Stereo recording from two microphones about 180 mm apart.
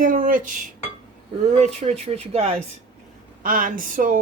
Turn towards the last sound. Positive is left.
turn(degrees=-50)  # may be behind; listen again after turning